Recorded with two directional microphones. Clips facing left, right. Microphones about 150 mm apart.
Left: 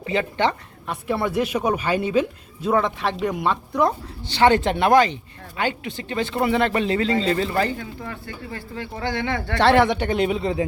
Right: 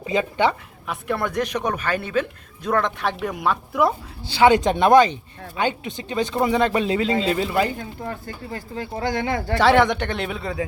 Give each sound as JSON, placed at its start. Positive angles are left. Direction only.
{"t": 0.0, "sound": "speech", "side_deg": -15}
{"t": 0.9, "sound": "a woman's voice", "side_deg": 0}
{"t": 7.8, "sound": "speech", "side_deg": -40}
{"t": 9.6, "sound": "speech", "side_deg": 0}